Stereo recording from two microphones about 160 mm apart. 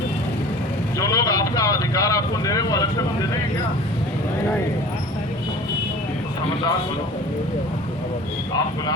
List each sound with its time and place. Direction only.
0.9 s speech: 20° left (ahead or behind)